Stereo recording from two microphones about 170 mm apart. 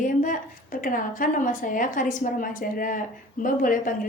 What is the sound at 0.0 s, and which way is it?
A woman's voice, 50° left (ahead or behind).